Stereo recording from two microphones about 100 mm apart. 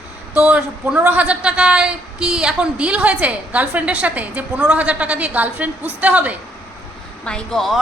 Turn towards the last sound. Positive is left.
turn(degrees=5)  # may be behind; listen again after turning